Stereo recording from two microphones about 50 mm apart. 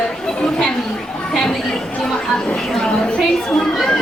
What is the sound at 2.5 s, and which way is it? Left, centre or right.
A woman's voice, centre.